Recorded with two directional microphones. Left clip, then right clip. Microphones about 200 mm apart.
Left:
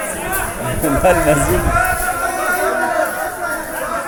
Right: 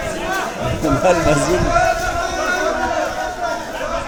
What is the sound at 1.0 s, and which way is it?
Speech, centre (ahead or behind).